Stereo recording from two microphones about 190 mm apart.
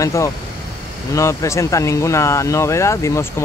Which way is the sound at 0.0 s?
15° left (ahead or behind).